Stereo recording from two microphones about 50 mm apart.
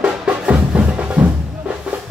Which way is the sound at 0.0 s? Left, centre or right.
Right.